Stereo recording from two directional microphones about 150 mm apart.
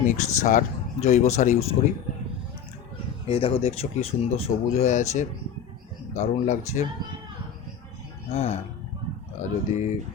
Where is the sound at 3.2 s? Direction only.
40° left (ahead or behind).